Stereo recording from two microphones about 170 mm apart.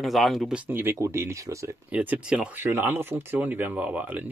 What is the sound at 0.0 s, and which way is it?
Speech, centre (ahead or behind).